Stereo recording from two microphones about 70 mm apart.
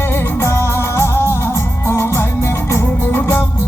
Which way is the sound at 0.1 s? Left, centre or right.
Left.